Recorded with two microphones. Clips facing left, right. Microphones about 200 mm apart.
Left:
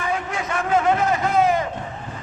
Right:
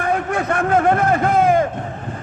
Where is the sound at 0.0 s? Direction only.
55° right (ahead or behind).